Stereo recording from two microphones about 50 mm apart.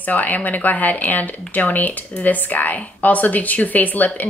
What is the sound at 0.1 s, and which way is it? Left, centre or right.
Speech, left.